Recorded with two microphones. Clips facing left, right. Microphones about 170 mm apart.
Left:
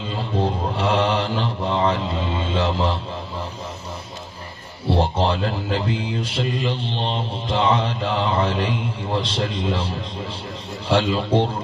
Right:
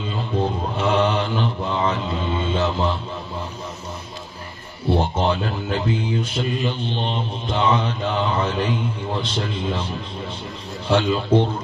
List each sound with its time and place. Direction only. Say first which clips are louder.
0.4 s mantra: left 1 dB; 30° left (ahead or behind)
4.8 s mantra: even; 30° left (ahead or behind)